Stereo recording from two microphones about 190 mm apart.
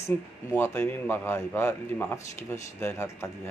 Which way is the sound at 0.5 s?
10° left (ahead or behind).